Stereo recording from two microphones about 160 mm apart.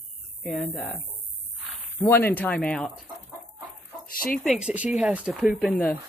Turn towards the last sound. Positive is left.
turn(degrees=0)  # may be behind; listen again after turning